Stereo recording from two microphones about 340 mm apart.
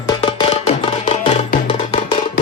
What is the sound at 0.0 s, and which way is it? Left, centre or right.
Music, centre.